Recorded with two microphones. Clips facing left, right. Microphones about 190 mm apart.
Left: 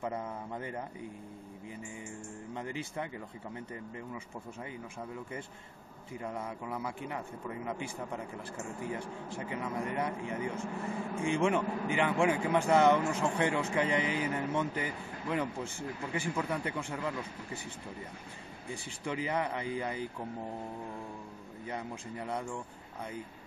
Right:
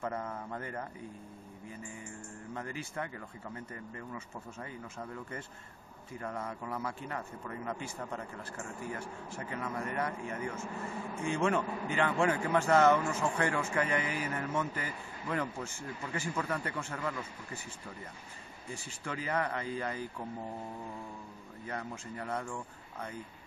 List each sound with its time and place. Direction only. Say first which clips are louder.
0.0 s speech: even; 10° left (ahead or behind)
2.5 s speech: left 1 dB; 20° left (ahead or behind)
6.1 s speech: left 1 dB; 15° left (ahead or behind)
18.9 s speech: left 2 dB; 15° left (ahead or behind)
21.6 s speech: left 1 dB; 15° left (ahead or behind)